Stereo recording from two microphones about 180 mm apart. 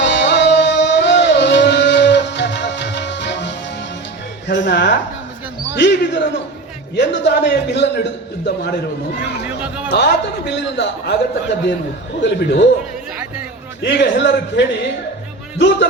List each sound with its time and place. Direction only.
0.0 s music: 80° left
4.4 s a sound: 75° left (ahead or behind)
5.7 s a man's voice: 75° left (ahead or behind)
9.9 s a man's voice: 70° left (ahead or behind)
12.2 s a man's voice: 80° left
13.8 s a man's voice: 70° left (ahead or behind)